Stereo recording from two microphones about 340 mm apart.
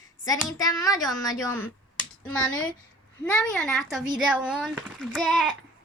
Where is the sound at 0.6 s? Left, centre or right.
Centre.